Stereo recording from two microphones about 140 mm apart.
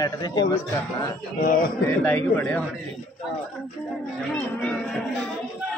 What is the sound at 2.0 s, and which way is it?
Speech, 15° left (ahead or behind).